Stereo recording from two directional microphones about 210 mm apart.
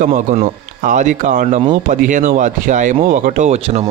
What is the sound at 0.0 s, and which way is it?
Speech, 35° right (ahead or behind).